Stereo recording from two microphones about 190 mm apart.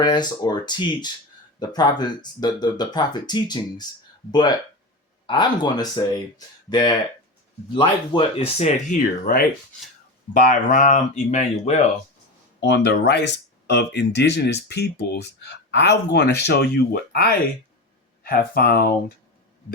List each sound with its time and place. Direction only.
0.0 s speech: 20° left (ahead or behind)
9.0 s speech: 50° left (ahead or behind)
12.5 s speech: 65° left (ahead or behind)